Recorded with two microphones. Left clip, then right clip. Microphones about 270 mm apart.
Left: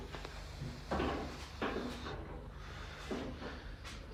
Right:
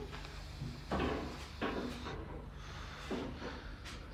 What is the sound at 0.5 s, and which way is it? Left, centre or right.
Cupboard open or close, centre.